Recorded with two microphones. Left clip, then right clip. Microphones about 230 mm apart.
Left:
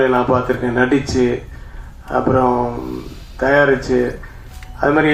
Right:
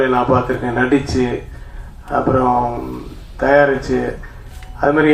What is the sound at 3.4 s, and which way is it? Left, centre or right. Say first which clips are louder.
Speech: right 1 dB; left.